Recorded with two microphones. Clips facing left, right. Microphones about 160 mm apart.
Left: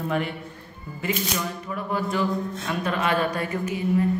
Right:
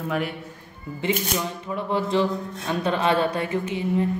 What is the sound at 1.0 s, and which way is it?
Speech, 25° right (ahead or behind).